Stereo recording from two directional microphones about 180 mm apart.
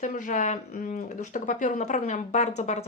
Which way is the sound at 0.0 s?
45° left (ahead or behind).